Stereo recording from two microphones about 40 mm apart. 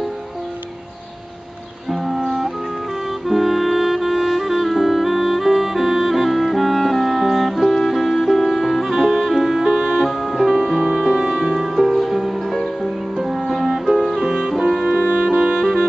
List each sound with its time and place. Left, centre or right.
1.9 s music: centre
9.0 s music: centre
10.8 s music: right
11.4 s music: centre
12.4 s music: centre
14.1 s music: centre
14.9 s music: right
15.2 s music: right